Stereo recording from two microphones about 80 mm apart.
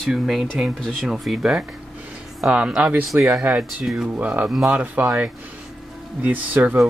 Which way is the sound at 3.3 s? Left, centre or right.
Centre.